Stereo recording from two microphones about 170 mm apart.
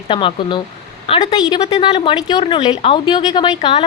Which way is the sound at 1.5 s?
30° left (ahead or behind).